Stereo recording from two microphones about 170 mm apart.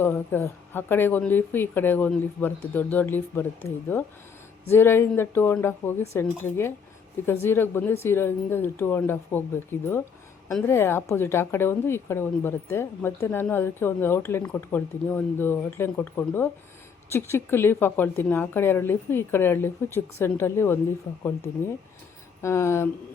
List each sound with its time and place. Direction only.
0.0 s a woman's voice: 10° left (ahead or behind)
22.4 s a woman's voice: 15° left (ahead or behind)